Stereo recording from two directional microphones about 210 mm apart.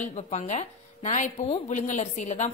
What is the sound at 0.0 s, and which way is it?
A woman's voice, 35° left (ahead or behind).